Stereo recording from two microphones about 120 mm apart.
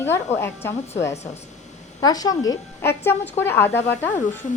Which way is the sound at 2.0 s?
30° left (ahead or behind).